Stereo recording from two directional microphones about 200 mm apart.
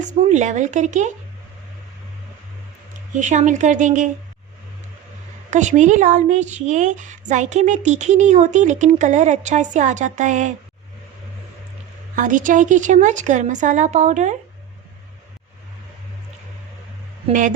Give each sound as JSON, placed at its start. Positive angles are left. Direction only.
{"t": 0.1, "sound": "a woman's voice", "side_deg": -35}
{"t": 3.2, "sound": "a woman's voice", "side_deg": -35}
{"t": 5.5, "sound": "a woman's voice", "side_deg": -35}
{"t": 12.1, "sound": "a woman's voice", "side_deg": -40}
{"t": 17.2, "sound": "speech", "side_deg": -40}